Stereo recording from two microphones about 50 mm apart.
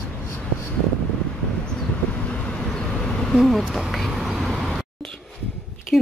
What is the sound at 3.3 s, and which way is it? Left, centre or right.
Speech, centre.